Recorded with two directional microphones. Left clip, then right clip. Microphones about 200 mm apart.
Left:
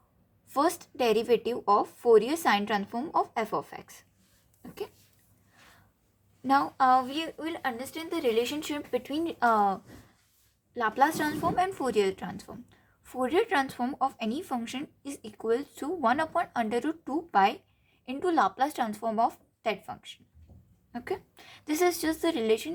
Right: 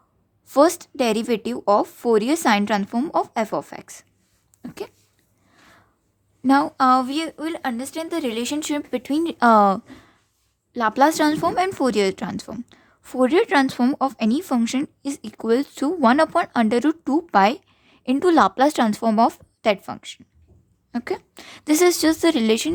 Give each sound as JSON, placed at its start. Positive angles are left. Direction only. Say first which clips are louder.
{"t": 0.5, "sound": "a woman's voice", "louder": "right 11 dB", "side_deg": -40}
{"t": 6.5, "sound": "a woman's voice", "louder": "right 6 dB", "side_deg": -45}